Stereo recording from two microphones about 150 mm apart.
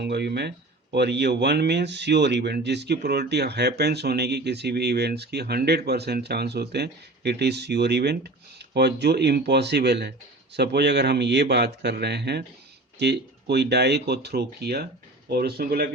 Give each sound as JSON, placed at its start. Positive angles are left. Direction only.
{"t": 0.0, "sound": "speech", "side_deg": -90}